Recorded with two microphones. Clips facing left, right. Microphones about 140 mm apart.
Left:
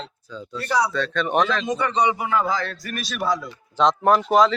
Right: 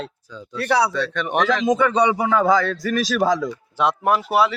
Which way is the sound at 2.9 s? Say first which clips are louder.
Right 5 dB; 90° right.